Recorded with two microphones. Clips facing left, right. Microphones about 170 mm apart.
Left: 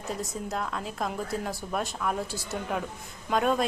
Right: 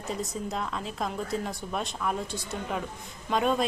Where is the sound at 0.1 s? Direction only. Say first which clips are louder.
Right 1 dB; centre (ahead or behind).